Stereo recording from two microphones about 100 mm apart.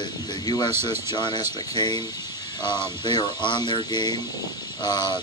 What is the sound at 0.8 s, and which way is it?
Speech, 50° left (ahead or behind).